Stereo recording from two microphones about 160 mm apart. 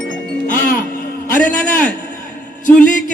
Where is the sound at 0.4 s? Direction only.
60° left (ahead or behind).